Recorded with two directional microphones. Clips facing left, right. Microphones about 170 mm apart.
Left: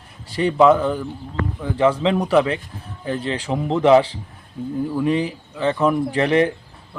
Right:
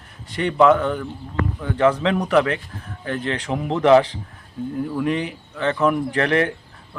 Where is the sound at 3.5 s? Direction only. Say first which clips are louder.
Left 1 dB; centre (ahead or behind).